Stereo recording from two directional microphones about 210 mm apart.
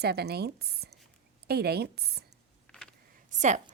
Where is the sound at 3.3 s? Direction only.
35° right (ahead or behind).